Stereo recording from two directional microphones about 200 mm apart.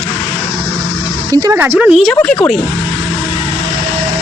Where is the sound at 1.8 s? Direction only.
5° right (ahead or behind).